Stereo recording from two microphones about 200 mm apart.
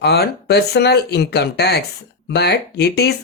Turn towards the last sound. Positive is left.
turn(degrees=55)  # may be behind; listen again after turning